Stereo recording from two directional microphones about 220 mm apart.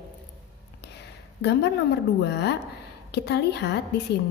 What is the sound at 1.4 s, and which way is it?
A woman's voice, 50° left (ahead or behind).